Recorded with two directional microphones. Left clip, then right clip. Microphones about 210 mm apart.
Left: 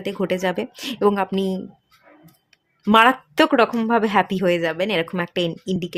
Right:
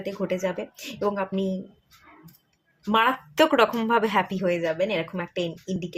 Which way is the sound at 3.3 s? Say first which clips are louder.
Left 3 dB; 25° left (ahead or behind).